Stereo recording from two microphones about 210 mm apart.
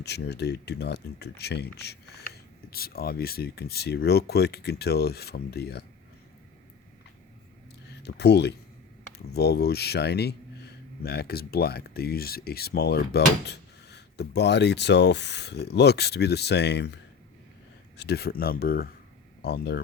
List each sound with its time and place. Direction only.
0.0 s speech: 50° left (ahead or behind)
8.0 s speech: 50° left (ahead or behind)